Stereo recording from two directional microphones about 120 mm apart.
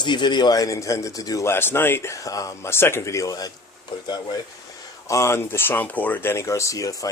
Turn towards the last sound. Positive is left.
turn(degrees=25)  # may be behind; listen again after turning